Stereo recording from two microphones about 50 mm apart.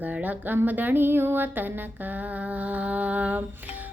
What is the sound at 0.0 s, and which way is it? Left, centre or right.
Music, right.